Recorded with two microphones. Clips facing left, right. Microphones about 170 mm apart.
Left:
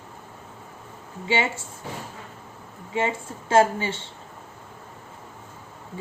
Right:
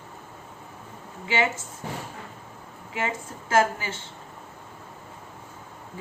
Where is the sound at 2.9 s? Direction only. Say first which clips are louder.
Left 4 dB; 30° left (ahead or behind).